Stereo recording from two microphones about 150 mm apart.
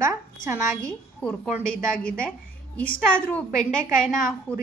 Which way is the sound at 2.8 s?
10° left (ahead or behind).